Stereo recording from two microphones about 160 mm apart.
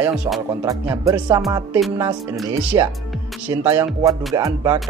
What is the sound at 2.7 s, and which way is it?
Speech, 25° right (ahead or behind).